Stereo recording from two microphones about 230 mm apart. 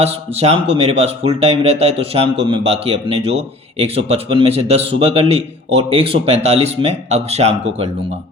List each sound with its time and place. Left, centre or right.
0.0 s speech: right